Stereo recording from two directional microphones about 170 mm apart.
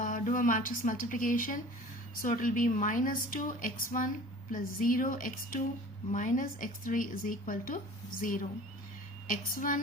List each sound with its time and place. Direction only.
0.0 s speech: 50° left (ahead or behind)
9.2 s speech: 50° left (ahead or behind)